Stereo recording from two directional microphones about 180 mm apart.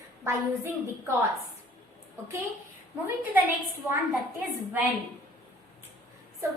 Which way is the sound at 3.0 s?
10° right (ahead or behind).